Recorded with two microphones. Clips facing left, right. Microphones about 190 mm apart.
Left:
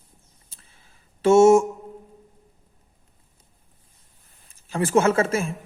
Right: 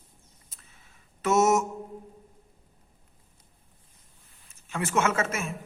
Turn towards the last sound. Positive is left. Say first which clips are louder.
# left 7 dB
turn(degrees=30)  # may be behind; listen again after turning